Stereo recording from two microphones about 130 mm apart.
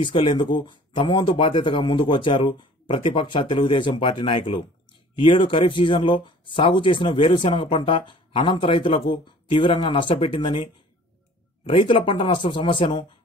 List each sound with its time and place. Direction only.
0.0 s speech: 40° left (ahead or behind)
11.7 s speech: 40° left (ahead or behind)